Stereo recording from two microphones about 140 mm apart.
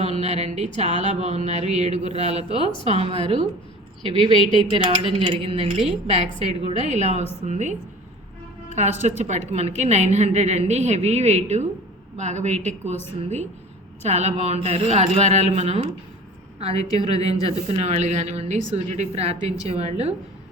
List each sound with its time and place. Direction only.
0.0 s a sound: 50° right (ahead or behind)
0.8 s a woman's voice: 50° right (ahead or behind)
4.4 s speech: 35° left (ahead or behind)
5.0 s a woman's voice: 40° right (ahead or behind)
16.9 s a woman's voice: 25° left (ahead or behind)
17.4 s a woman's voice: 50° right (ahead or behind)